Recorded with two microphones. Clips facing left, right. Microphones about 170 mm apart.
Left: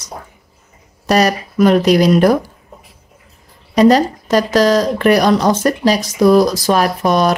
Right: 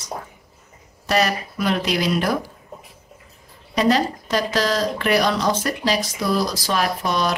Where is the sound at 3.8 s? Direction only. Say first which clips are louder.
Left 8 dB; 45° left (ahead or behind).